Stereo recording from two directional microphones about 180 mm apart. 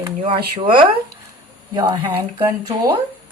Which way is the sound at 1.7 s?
20° right (ahead or behind).